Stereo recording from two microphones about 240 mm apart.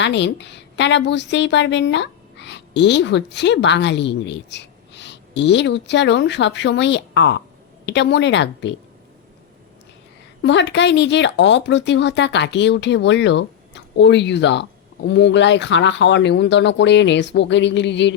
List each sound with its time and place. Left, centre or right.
0.0 s a woman's voice: left
10.4 s speech: left